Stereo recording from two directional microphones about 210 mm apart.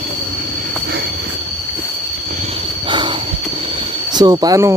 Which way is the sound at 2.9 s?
20° right (ahead or behind).